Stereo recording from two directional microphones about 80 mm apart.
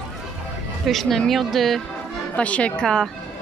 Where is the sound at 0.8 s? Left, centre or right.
Centre.